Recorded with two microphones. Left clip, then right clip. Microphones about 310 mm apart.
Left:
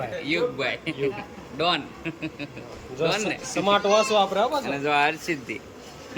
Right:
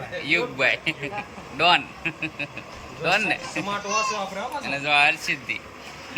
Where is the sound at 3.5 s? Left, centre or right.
Left.